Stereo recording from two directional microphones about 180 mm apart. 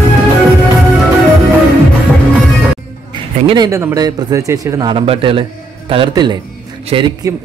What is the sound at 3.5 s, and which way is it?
A man's voice, 20° right (ahead or behind).